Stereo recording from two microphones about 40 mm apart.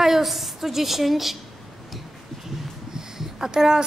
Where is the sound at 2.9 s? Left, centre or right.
Centre.